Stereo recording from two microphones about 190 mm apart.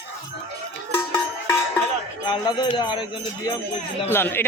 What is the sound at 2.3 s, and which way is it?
Speech, 20° left (ahead or behind).